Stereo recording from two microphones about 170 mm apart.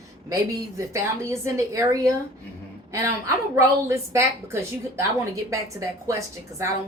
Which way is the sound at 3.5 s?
15° right (ahead or behind).